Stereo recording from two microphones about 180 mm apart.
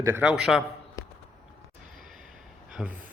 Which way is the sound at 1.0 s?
20° left (ahead or behind).